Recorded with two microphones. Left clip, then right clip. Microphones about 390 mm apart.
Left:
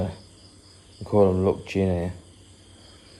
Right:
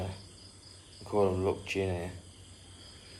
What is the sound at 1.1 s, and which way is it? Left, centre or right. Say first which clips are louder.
Speech: left 9 dB; left.